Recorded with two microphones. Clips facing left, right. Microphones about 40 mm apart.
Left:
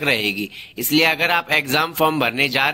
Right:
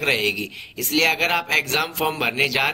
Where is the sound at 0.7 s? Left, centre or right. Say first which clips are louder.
Left 3 dB; left.